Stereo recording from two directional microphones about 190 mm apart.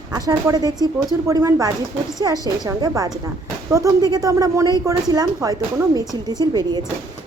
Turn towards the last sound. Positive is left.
turn(degrees=-20)  # may be behind; listen again after turning